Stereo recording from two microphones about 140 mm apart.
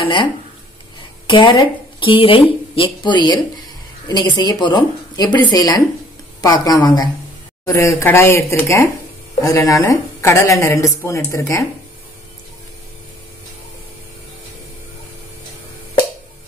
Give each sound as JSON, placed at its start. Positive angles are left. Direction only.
{"t": 0.0, "sound": "a woman's voice", "side_deg": 35}